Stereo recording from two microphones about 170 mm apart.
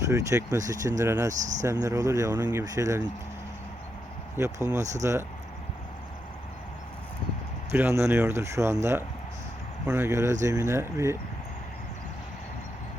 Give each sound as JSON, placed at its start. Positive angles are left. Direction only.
{"t": 0.0, "sound": "speech", "side_deg": -15}
{"t": 1.3, "sound": "speech", "side_deg": -45}
{"t": 1.6, "sound": "speech", "side_deg": -20}
{"t": 4.4, "sound": "speech", "side_deg": -15}
{"t": 4.8, "sound": "speech", "side_deg": -45}
{"t": 7.7, "sound": "speech", "side_deg": -15}